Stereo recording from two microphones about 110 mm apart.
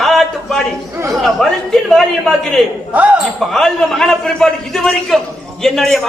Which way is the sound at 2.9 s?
15° right (ahead or behind).